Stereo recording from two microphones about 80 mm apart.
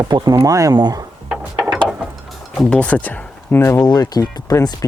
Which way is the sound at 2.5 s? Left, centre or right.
Centre.